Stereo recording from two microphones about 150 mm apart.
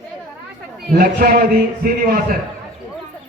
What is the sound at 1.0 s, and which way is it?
A man's voice, 80° right.